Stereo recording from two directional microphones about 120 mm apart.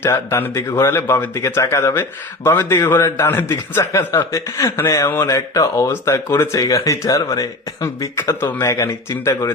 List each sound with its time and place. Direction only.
0.0 s speech: 20° left (ahead or behind)